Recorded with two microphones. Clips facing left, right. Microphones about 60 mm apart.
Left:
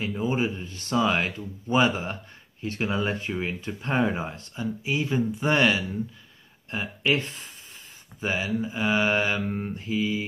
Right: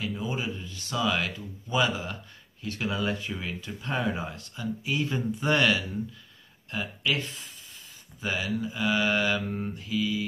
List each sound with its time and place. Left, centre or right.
0.0 s speech: left
6.7 s speech: left
8.2 s speech: left